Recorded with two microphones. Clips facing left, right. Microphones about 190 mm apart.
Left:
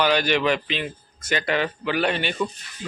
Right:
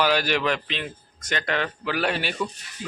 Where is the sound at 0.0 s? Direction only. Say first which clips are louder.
Left 2 dB; 5° right (ahead or behind).